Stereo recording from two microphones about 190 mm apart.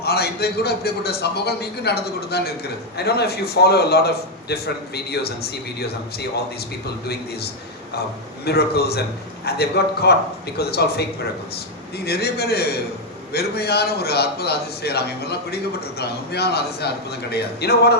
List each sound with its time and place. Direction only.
0.0 s a man's voice: 55° left (ahead or behind)
8.4 s a man's voice: 55° left (ahead or behind)